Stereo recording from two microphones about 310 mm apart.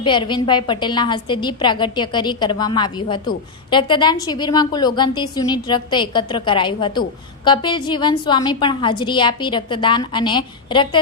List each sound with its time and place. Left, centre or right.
0.0 s a woman's voice: centre